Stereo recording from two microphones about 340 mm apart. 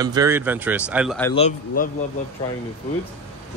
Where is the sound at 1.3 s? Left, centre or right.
Left.